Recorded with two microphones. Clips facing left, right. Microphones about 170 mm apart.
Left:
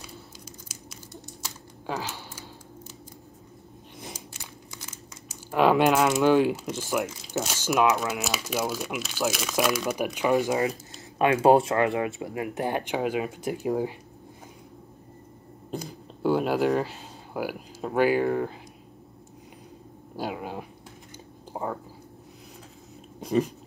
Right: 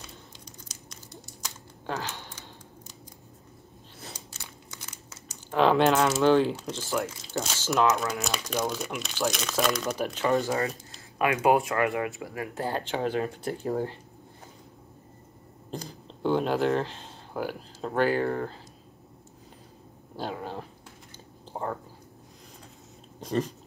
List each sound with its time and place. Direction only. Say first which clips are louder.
0.0 s crumpling: left 3 dB; 5° left (ahead or behind)
4.0 s biting: left 3 dB; 10° left (ahead or behind)
5.5 s speech: left 1 dB; 10° left (ahead or behind)
11.4 s speech: left 4 dB; 30° left (ahead or behind); by 13.9 s 10° left (ahead or behind)
15.7 s a sound: left 3 dB; 5° left (ahead or behind)
20.2 s dog: left 2 dB; 10° left (ahead or behind)
21.5 s whispering: left 1 dB; 10° left (ahead or behind)
23.2 s dog: left 4 dB; 10° left (ahead or behind)